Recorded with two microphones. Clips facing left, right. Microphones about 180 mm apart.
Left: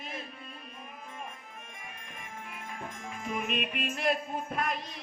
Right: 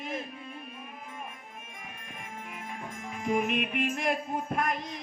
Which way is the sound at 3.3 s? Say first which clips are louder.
Right 5 dB; 55° right (ahead or behind).